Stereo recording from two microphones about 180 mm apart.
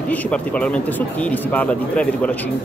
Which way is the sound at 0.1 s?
5° left (ahead or behind).